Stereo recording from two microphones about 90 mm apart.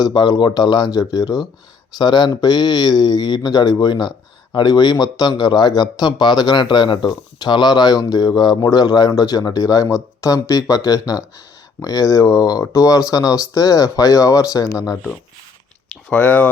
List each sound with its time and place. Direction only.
0.0 s a man's voice: 50° left (ahead or behind)
16.0 s speech: 15° left (ahead or behind)